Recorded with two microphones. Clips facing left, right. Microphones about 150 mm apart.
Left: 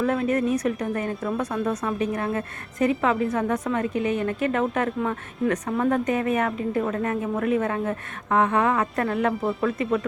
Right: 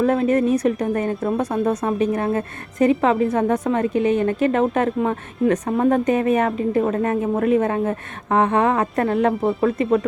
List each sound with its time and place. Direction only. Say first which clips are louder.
0.0 s a woman's voice: right 5 dB; 30° right (ahead or behind)